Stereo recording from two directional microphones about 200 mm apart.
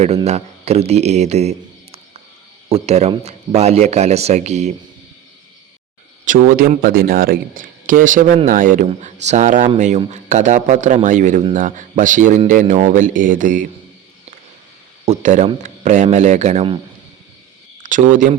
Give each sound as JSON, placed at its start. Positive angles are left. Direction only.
{"t": 0.0, "sound": "a man's voice", "side_deg": -30}
{"t": 6.2, "sound": "speech", "side_deg": -40}
{"t": 15.0, "sound": "speech", "side_deg": -35}
{"t": 17.8, "sound": "speech", "side_deg": -40}